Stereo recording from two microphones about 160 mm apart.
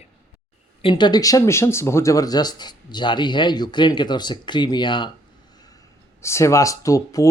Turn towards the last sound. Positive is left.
turn(degrees=20)  # may be behind; listen again after turning